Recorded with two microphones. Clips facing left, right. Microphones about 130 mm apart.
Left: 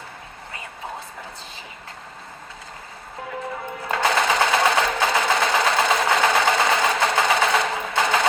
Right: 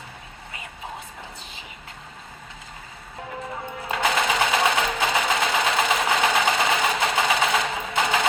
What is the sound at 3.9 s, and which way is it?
Sewing machine, 30° left (ahead or behind).